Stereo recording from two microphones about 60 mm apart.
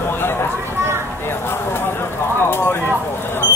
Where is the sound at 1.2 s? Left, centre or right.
Left.